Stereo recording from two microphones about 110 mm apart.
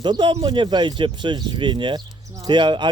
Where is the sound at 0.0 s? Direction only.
45° right (ahead or behind).